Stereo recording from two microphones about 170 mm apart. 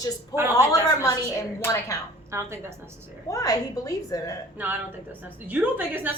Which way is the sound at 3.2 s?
20° left (ahead or behind).